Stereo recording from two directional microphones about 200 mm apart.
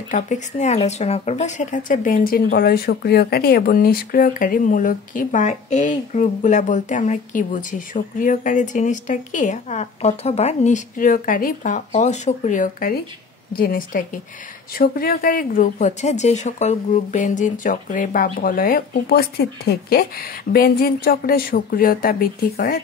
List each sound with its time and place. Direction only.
0.1 s speech: 35° left (ahead or behind)